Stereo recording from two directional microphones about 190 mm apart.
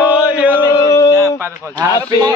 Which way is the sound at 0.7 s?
20° left (ahead or behind).